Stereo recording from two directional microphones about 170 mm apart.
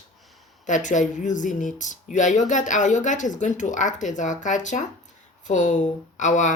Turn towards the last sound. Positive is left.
turn(degrees=45)  # may be behind; listen again after turning